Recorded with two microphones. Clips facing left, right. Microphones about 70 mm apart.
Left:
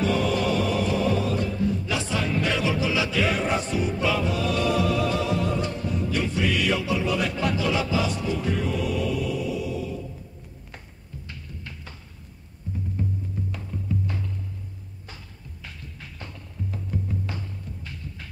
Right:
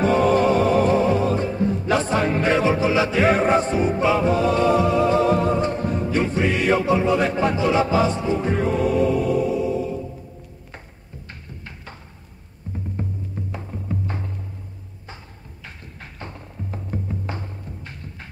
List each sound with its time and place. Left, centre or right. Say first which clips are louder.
0.0 s music: right 7 dB; right
12.7 s music: even; right
16.0 s music: right 7 dB; right